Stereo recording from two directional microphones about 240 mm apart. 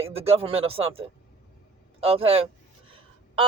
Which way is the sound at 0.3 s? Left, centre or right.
Right.